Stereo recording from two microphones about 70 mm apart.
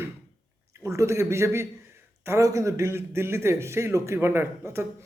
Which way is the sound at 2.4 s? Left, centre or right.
Right.